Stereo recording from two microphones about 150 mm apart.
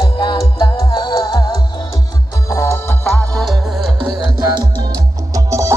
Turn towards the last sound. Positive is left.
turn(degrees=-20)  # may be behind; listen again after turning